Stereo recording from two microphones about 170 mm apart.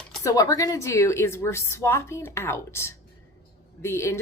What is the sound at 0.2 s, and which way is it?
A woman's voice, 20° left (ahead or behind).